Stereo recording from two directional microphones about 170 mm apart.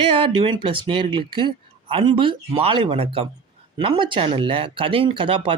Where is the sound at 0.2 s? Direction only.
30° right (ahead or behind).